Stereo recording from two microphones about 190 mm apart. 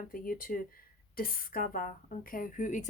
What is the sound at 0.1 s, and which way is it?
Speech, 50° left (ahead or behind).